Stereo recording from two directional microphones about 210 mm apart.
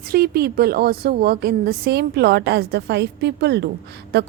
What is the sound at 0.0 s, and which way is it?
A woman's voice, 45° right (ahead or behind).